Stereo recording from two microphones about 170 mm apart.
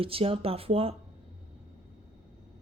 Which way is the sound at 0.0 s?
35° right (ahead or behind).